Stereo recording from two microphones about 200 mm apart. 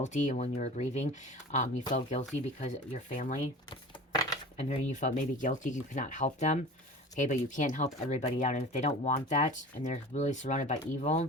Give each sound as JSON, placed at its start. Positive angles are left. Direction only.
{"t": 0.0, "sound": "speech", "side_deg": 35}
{"t": 1.8, "sound": "speech", "side_deg": 20}
{"t": 2.6, "sound": "speech", "side_deg": 35}
{"t": 3.7, "sound": "a sound", "side_deg": 20}
{"t": 4.5, "sound": "speech", "side_deg": 35}